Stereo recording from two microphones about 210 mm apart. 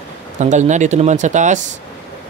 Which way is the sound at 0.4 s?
35° right (ahead or behind).